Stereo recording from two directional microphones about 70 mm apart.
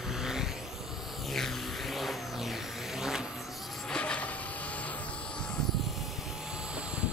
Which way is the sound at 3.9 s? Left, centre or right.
Centre.